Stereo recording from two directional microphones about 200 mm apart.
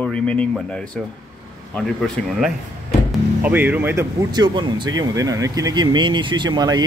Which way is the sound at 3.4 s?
10° right (ahead or behind).